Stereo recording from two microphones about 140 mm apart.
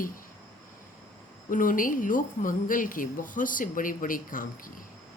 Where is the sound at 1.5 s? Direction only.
75° left (ahead or behind).